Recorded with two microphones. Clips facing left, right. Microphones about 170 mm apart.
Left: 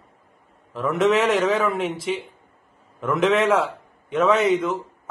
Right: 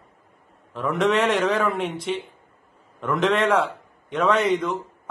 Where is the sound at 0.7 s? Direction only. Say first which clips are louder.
Left 2 dB; centre (ahead or behind).